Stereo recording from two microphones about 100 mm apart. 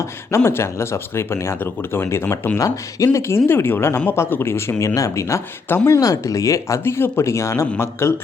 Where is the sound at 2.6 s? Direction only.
35° left (ahead or behind).